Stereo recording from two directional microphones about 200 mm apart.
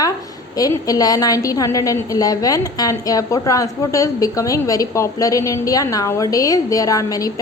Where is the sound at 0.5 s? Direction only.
20° left (ahead or behind).